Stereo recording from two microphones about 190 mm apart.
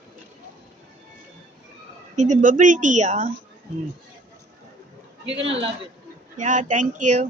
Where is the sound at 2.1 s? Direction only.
40° right (ahead or behind).